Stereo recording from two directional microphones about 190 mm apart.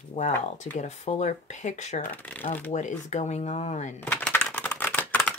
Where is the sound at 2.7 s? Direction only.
40° left (ahead or behind).